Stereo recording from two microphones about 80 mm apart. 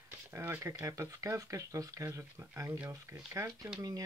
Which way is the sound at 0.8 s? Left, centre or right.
Right.